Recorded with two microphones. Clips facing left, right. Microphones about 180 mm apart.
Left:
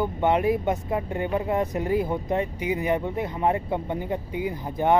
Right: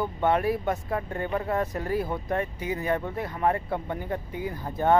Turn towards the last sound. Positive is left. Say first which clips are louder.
# left 2 dB
turn(degrees=15)  # may be behind; listen again after turning